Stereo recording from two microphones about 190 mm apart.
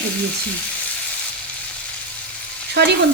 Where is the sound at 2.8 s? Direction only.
60° right (ahead or behind).